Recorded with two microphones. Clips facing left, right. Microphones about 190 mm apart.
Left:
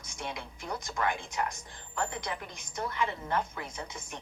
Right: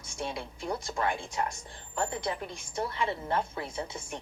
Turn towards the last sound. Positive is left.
turn(degrees=-30)  # may be behind; listen again after turning